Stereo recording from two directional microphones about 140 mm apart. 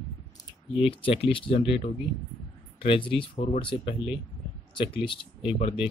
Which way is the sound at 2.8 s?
40° left (ahead or behind).